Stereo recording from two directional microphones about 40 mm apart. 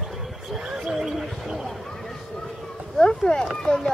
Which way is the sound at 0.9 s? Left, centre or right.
Centre.